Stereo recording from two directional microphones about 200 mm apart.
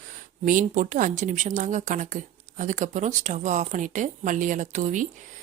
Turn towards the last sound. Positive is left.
turn(degrees=-35)  # may be behind; listen again after turning